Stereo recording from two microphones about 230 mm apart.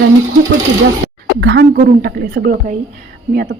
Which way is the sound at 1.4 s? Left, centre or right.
Right.